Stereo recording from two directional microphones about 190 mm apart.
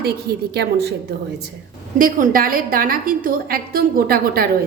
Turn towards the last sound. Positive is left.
turn(degrees=-50)  # may be behind; listen again after turning